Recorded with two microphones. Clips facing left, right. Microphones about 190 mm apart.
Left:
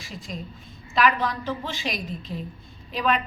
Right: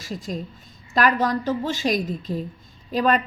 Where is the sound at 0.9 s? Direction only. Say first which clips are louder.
Right 3 dB; 45° right (ahead or behind).